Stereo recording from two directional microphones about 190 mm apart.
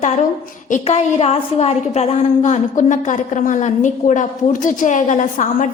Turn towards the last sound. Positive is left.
turn(degrees=40)  # may be behind; listen again after turning